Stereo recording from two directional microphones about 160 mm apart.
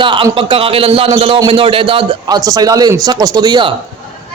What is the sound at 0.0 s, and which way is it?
A man's voice, 30° right (ahead or behind).